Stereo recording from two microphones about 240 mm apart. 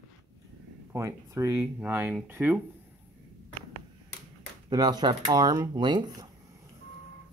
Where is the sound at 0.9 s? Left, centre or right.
Centre.